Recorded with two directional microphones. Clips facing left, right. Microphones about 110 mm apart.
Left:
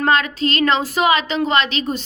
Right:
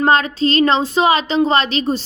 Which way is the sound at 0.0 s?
35° right (ahead or behind).